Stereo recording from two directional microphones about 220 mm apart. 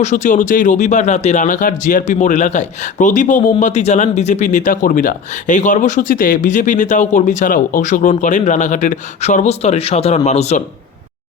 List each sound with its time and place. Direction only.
0.0 s speech: 35° left (ahead or behind)